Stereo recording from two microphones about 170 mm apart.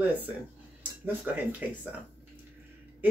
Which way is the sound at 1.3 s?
10° right (ahead or behind).